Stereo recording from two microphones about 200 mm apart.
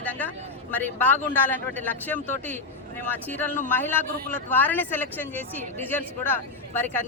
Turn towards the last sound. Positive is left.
turn(degrees=10)  # may be behind; listen again after turning